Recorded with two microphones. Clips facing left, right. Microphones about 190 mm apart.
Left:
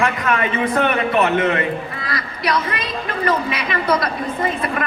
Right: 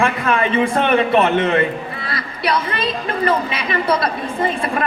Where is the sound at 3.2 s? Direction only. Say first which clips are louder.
Right 1 dB; 30° right (ahead or behind).